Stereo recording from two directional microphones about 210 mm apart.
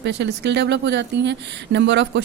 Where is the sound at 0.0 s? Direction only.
55° right (ahead or behind).